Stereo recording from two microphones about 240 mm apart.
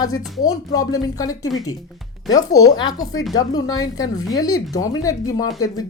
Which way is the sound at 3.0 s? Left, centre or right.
Left.